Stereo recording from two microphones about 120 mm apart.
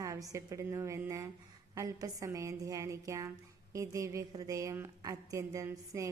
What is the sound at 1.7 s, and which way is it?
A woman's voice, 30° right (ahead or behind).